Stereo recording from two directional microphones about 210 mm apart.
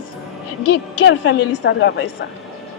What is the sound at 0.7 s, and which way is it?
A woman's voice, 55° left (ahead or behind).